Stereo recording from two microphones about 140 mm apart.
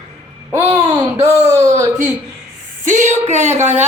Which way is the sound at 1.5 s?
25° right (ahead or behind).